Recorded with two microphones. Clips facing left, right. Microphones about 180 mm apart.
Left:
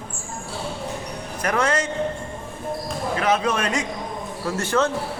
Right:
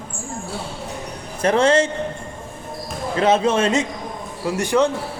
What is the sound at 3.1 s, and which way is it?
Speech, 25° right (ahead or behind).